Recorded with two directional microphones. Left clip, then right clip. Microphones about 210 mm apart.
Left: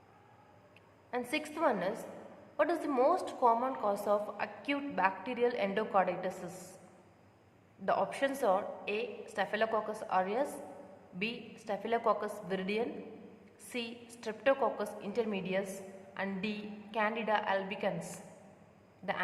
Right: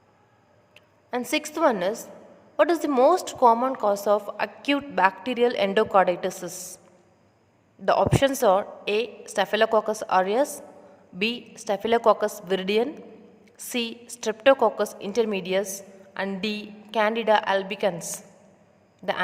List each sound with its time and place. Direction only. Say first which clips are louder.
1.1 s a woman's voice: right 9 dB; 50° right (ahead or behind)
7.9 s a woman's voice: right 11 dB; 55° right (ahead or behind)
19.0 s a woman's voice: right 9 dB; 50° right (ahead or behind)